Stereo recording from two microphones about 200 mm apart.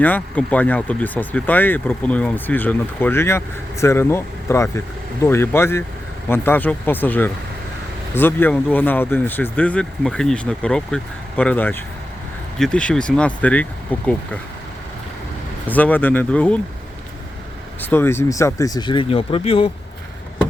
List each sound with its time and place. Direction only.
0.0 s speech: 10° left (ahead or behind)
15.6 s speech: 10° left (ahead or behind)
17.8 s speech: 10° left (ahead or behind); by 19.7 s 30° left (ahead or behind)